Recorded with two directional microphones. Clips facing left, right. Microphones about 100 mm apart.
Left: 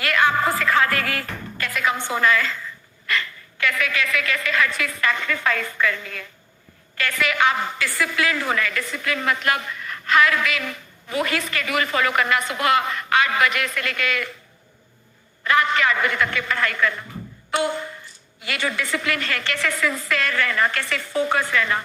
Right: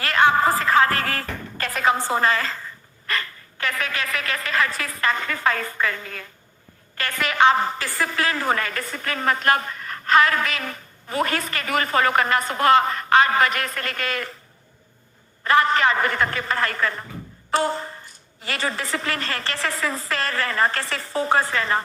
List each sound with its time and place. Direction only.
0.0 s music: 35° right (ahead or behind)
3.1 s a woman's voice: 35° right (ahead or behind)
15.4 s a woman's voice: 40° right (ahead or behind)